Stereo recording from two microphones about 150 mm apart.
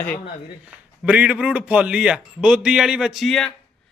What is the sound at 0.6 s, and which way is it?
A man's voice, 10° right (ahead or behind).